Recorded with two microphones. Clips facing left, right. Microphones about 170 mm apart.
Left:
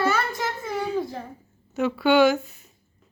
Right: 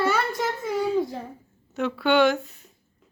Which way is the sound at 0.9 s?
20° right (ahead or behind).